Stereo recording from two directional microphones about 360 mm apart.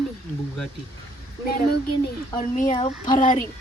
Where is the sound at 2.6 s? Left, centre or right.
Centre.